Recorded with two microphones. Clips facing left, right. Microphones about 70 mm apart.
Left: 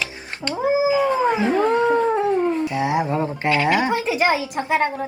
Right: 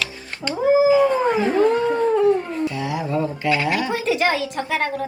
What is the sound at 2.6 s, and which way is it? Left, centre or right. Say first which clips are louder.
A woman's voice: left 3 dB; left.